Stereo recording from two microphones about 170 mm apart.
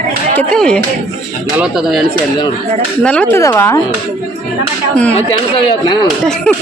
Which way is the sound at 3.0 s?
5° left (ahead or behind).